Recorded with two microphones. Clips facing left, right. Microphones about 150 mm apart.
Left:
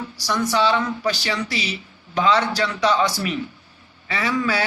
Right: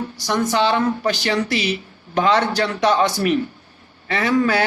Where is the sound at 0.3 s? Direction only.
55° right (ahead or behind).